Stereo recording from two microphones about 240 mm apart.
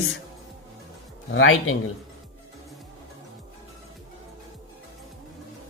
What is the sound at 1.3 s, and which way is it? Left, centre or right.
Speech, left.